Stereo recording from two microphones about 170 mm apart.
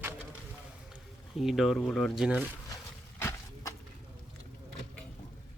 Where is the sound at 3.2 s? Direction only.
15° left (ahead or behind).